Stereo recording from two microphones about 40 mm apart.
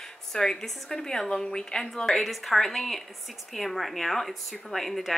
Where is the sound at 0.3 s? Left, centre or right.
Centre.